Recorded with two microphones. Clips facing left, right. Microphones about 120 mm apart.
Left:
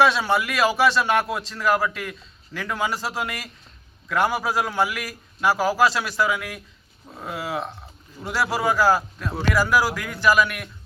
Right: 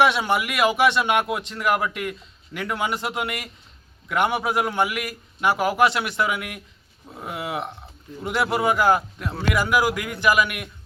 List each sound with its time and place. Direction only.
0.0 s a man's voice: 20° right (ahead or behind)